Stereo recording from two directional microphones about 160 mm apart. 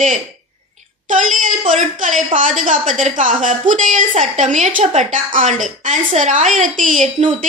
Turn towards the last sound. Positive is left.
turn(degrees=-50)  # may be behind; listen again after turning